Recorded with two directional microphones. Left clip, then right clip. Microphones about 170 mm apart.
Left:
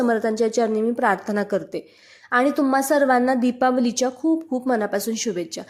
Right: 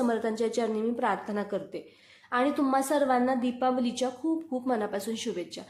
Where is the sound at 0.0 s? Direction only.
35° left (ahead or behind).